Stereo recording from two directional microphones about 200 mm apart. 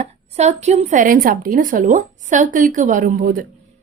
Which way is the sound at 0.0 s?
35° right (ahead or behind).